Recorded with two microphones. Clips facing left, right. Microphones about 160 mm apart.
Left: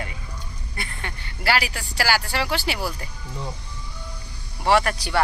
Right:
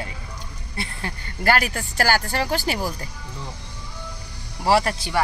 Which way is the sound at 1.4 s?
50° right (ahead or behind).